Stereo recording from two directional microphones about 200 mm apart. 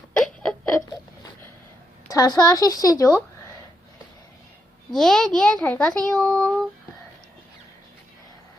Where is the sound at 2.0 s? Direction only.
20° left (ahead or behind).